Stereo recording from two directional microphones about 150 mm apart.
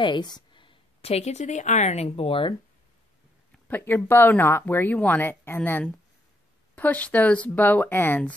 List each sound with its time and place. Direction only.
0.0 s speech: 30° left (ahead or behind)
3.6 s speech: 10° left (ahead or behind)